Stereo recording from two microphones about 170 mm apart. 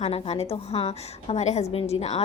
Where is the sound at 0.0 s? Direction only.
35° left (ahead or behind).